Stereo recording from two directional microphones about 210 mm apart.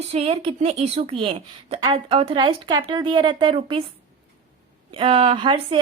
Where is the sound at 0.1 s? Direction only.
30° right (ahead or behind).